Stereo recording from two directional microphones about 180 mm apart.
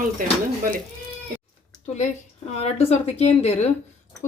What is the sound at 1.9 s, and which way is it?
Speech, 40° left (ahead or behind).